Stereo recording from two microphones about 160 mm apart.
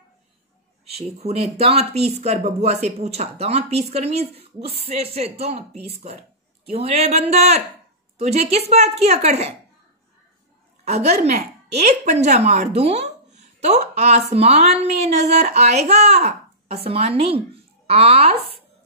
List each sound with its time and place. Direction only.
0.8 s speech: 40° right (ahead or behind)
10.9 s a woman's voice: 40° right (ahead or behind)